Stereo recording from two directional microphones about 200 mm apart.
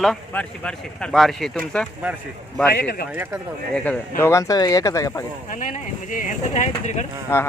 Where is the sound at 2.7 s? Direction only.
55° left (ahead or behind).